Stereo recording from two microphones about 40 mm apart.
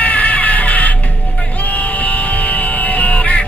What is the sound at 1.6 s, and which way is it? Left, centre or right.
Crow, left.